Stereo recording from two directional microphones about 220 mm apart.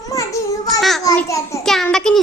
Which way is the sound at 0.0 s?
15° left (ahead or behind).